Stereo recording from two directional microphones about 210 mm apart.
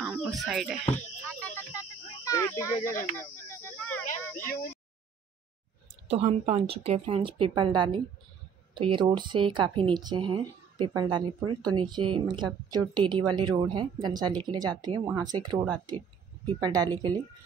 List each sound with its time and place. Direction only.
0.0 s speech: centre (ahead or behind)
1.2 s a sound: 10° left (ahead or behind)
6.0 s speech: 30° right (ahead or behind)